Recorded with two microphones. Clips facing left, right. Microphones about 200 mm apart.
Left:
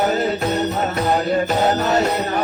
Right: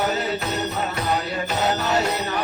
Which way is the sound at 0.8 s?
50° left (ahead or behind).